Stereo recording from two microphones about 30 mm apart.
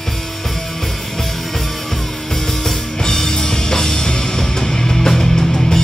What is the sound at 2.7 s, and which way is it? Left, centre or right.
Music, centre.